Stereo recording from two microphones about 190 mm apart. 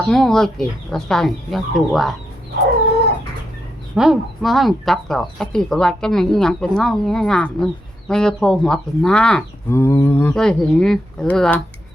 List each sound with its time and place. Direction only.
0.1 s speech: 5° left (ahead or behind)
3.9 s speech: centre (ahead or behind)